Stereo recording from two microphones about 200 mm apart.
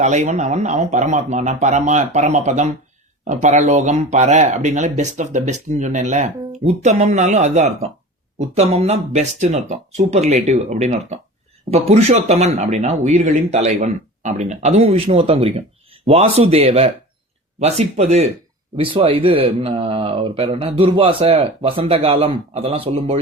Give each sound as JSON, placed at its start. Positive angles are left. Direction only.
{"t": 0.0, "sound": "speech", "side_deg": -35}